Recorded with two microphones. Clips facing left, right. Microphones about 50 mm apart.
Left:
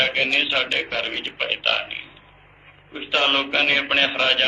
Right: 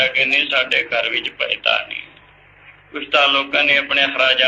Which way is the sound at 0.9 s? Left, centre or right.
Right.